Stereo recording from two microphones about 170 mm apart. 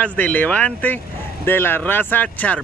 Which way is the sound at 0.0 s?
10° left (ahead or behind).